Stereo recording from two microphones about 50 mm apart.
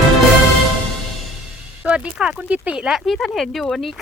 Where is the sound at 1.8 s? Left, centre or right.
Centre.